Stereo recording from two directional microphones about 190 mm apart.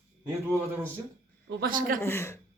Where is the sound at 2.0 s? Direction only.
15° left (ahead or behind).